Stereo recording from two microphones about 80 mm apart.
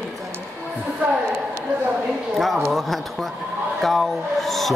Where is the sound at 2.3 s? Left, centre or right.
Centre.